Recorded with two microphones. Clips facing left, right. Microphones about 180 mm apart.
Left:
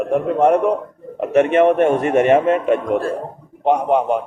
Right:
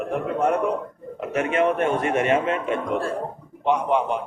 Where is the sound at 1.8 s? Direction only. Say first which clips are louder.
Left 7 dB; 45° left (ahead or behind).